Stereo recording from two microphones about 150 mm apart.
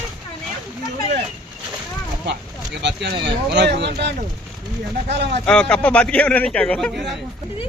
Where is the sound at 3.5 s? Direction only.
90° right.